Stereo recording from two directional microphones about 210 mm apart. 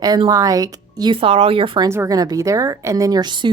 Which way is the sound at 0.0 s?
20° right (ahead or behind).